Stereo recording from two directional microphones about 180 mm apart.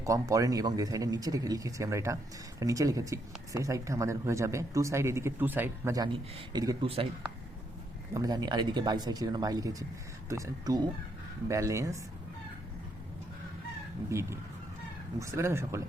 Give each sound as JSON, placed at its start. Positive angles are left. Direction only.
{"t": 0.0, "sound": "speech", "side_deg": -20}
{"t": 8.1, "sound": "speech", "side_deg": -20}
{"t": 14.1, "sound": "speech", "side_deg": -15}